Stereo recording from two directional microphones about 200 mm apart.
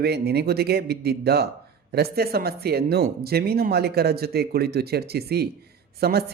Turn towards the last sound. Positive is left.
turn(degrees=-50)  # may be behind; listen again after turning